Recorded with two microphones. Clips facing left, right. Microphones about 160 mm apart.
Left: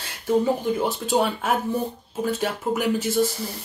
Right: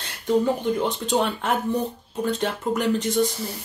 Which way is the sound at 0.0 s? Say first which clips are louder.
Even; 5° left (ahead or behind).